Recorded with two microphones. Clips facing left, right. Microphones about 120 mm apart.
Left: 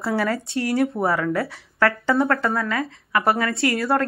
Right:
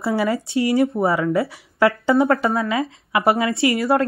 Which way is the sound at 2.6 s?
15° right (ahead or behind).